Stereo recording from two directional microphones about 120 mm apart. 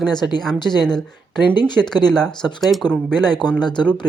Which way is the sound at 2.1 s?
5° left (ahead or behind).